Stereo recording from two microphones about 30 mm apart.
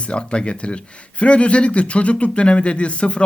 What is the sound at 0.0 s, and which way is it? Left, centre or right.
A man's voice, left.